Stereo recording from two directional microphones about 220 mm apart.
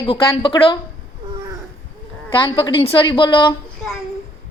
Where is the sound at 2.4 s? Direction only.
20° left (ahead or behind).